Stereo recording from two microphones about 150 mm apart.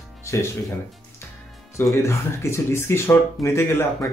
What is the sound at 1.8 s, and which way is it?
Speech, 20° left (ahead or behind).